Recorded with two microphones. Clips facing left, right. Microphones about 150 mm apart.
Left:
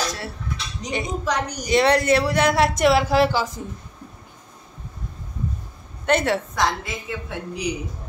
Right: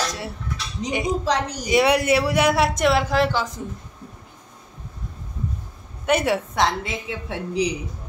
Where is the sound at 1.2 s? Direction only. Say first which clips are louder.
Right 2 dB; 30° right (ahead or behind).